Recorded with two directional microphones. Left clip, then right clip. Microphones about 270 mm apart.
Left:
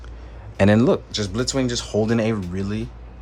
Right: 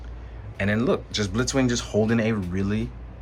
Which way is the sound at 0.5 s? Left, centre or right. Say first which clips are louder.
Left 7 dB; centre.